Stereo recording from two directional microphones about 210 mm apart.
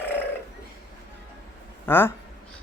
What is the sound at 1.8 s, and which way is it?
Speech, 10° left (ahead or behind).